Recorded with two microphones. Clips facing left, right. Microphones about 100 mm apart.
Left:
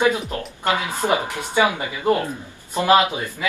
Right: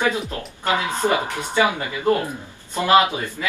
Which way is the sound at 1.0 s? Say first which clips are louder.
Even; 15° left (ahead or behind).